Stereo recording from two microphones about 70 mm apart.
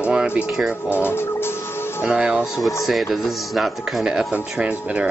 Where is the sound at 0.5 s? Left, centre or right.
Centre.